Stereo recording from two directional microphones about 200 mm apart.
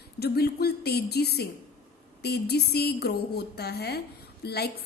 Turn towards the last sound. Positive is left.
turn(degrees=55)  # may be behind; listen again after turning